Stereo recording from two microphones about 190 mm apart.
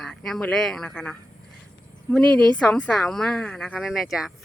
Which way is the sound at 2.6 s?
5° left (ahead or behind).